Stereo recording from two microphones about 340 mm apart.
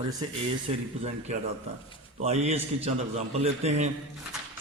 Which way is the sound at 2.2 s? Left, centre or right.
Centre.